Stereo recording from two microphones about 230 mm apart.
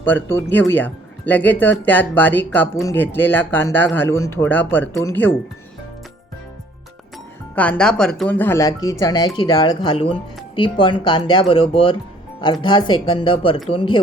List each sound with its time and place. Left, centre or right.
0.0 s speech: centre
7.5 s speech: centre; by 14.0 s left